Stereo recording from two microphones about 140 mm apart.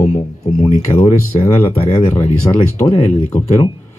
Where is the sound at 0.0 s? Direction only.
55° left (ahead or behind).